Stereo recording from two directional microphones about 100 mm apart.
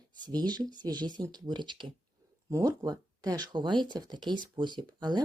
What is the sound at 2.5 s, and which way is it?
Speech, 35° right (ahead or behind).